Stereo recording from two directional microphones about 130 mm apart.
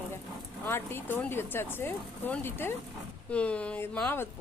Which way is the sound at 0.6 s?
15° left (ahead or behind).